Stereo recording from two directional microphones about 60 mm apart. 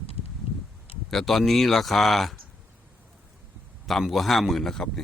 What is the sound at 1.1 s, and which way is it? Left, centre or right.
Speech, centre.